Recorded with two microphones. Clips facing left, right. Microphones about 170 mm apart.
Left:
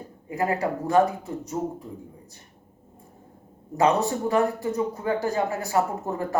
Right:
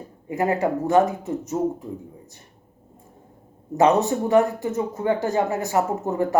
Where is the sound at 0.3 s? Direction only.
20° right (ahead or behind).